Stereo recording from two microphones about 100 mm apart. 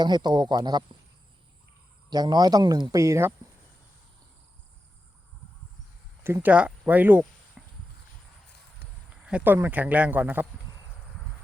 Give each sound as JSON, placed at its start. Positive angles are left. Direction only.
{"t": 0.0, "sound": "speech", "side_deg": -45}
{"t": 2.0, "sound": "speech", "side_deg": -45}
{"t": 3.0, "sound": "speech", "side_deg": -30}
{"t": 6.2, "sound": "speech", "side_deg": -25}
{"t": 6.5, "sound": "speech", "side_deg": -15}
{"t": 7.6, "sound": "clip-clop", "side_deg": -10}
{"t": 9.2, "sound": "speech", "side_deg": -15}